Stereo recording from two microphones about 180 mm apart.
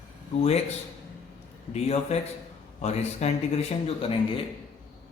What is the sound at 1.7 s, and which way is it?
A man's voice, 35° left (ahead or behind).